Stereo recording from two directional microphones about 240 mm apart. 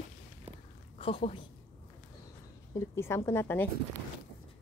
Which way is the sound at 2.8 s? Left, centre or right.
Centre.